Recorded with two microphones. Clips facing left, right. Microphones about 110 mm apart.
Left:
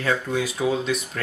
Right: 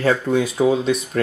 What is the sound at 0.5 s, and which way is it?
Speech, 30° right (ahead or behind).